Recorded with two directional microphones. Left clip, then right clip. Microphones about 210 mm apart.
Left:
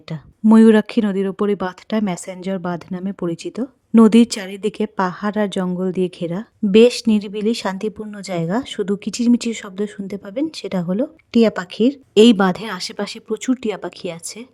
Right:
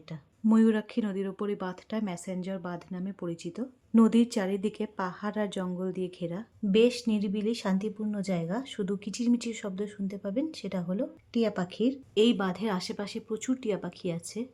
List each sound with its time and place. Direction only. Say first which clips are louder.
0.1 s speech: left 13 dB; 45° left (ahead or behind)